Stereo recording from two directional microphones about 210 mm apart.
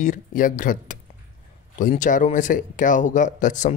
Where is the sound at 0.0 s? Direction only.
40° left (ahead or behind).